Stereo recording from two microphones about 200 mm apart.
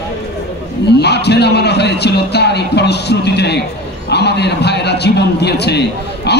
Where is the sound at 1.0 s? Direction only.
55° left (ahead or behind).